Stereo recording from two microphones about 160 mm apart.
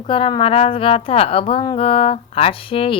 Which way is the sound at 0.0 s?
35° left (ahead or behind).